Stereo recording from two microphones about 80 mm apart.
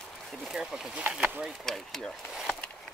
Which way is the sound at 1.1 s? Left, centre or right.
Centre.